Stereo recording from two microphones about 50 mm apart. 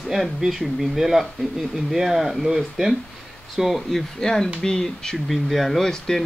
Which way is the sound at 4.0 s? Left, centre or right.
Centre.